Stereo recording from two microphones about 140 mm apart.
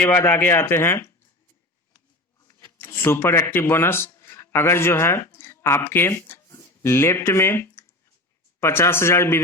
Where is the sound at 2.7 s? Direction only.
15° left (ahead or behind).